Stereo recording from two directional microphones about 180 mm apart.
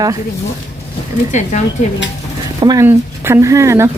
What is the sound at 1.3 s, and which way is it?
Speech, 40° left (ahead or behind).